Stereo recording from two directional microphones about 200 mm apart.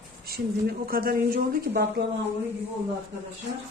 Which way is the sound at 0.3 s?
50° right (ahead or behind).